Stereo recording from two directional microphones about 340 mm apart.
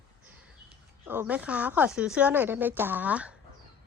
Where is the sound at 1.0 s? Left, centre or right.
Centre.